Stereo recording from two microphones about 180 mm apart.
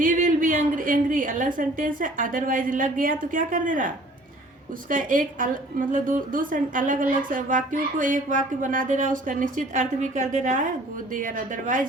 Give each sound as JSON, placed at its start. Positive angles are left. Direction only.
{"t": 0.0, "sound": "a woman's voice", "side_deg": -50}